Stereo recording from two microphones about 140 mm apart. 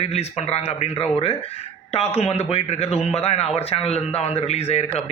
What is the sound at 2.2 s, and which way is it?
A man's voice, 50° left (ahead or behind).